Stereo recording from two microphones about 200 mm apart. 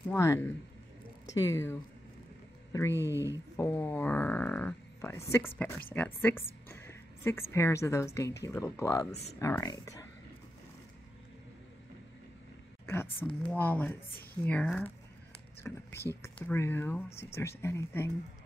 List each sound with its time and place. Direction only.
0.1 s speech: 15° left (ahead or behind)
3.0 s speech: 15° right (ahead or behind)
3.5 s a woman's voice: 10° left (ahead or behind)
9.1 s speech: 35° left (ahead or behind)
9.4 s speech: 15° left (ahead or behind)
12.8 s a woman's voice: 10° left (ahead or behind)